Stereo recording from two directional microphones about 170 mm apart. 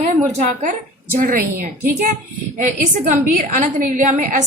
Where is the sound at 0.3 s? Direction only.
45° right (ahead or behind).